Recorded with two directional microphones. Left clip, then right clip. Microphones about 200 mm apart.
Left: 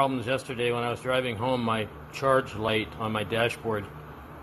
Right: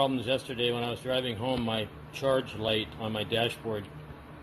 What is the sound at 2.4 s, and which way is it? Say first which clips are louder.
Speech: left 4 dB; 35° left (ahead or behind).